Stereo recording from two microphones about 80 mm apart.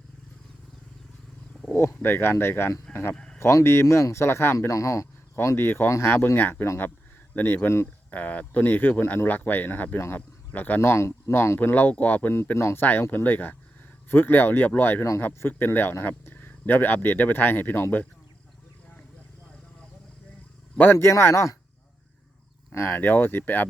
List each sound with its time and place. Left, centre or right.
1.7 s speech: left
4.5 s speech: left
5.5 s speech: left
10.8 s speech: left
11.7 s speech: left
12.5 s speech: left
12.8 s speech: left
20.7 s speech: left
22.7 s speech: left